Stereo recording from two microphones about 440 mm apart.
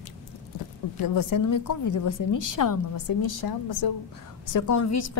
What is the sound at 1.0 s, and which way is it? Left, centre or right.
A woman's voice, left.